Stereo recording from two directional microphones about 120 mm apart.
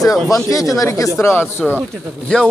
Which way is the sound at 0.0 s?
30° left (ahead or behind).